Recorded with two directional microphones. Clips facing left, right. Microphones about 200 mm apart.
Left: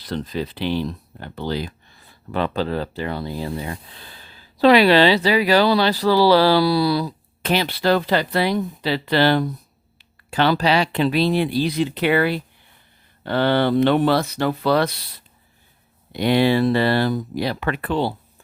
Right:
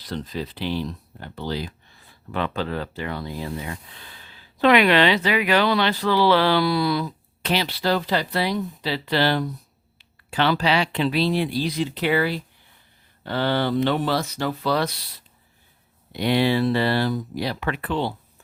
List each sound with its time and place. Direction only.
0.0 s speech: 65° left (ahead or behind)
2.3 s speech: 35° left (ahead or behind); by 9.5 s 55° left (ahead or behind)
10.0 s speech: 45° left (ahead or behind); by 15.0 s 60° left (ahead or behind)
16.1 s speech: 50° left (ahead or behind)